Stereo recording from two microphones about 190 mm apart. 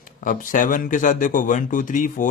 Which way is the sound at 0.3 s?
45° left (ahead or behind).